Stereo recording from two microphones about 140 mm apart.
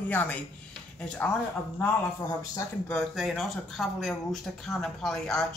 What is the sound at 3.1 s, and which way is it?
Speech, centre (ahead or behind).